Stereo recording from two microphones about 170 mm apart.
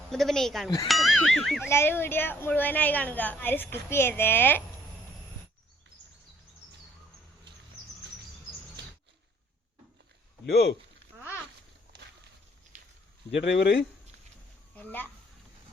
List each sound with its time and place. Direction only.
0.1 s speech: centre (ahead or behind)
1.7 s a woman's voice: 15° left (ahead or behind)
10.4 s speech: 65° left (ahead or behind)
13.3 s speech: 90° left
14.8 s a woman's voice: 10° left (ahead or behind)